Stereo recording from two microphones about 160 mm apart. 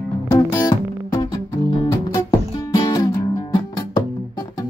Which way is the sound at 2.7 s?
25° left (ahead or behind).